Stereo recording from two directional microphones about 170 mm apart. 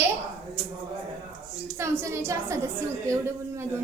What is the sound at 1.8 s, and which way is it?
A woman's voice, 15° right (ahead or behind).